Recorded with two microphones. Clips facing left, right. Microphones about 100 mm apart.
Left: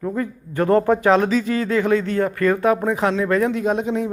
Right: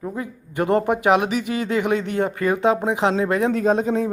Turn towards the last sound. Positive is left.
turn(degrees=-40)  # may be behind; listen again after turning